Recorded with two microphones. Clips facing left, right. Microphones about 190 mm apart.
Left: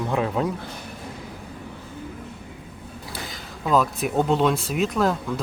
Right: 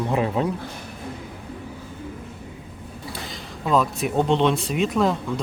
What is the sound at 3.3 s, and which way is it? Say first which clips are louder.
Speech: even; centre (ahead or behind).